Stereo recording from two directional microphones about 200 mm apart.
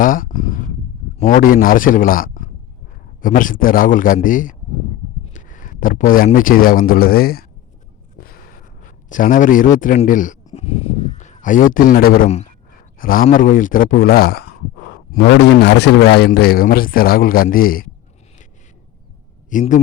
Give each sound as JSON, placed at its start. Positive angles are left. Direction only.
{"t": 0.0, "sound": "a sound", "side_deg": 45}
{"t": 1.2, "sound": "a man's voice", "side_deg": 40}
{"t": 8.8, "sound": "a man's voice", "side_deg": 40}
{"t": 19.5, "sound": "a man's voice", "side_deg": 40}